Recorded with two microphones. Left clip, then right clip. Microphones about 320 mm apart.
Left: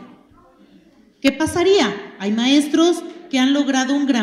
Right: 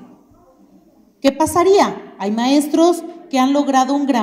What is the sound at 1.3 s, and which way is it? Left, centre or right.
A woman's voice, right.